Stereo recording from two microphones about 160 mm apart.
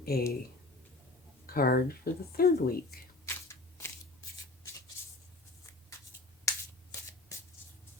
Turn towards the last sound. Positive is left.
turn(degrees=20)  # may be behind; listen again after turning